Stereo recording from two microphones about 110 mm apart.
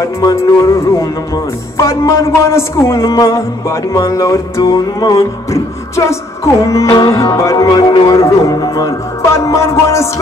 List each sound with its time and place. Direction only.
0.0 s music: 30° left (ahead or behind)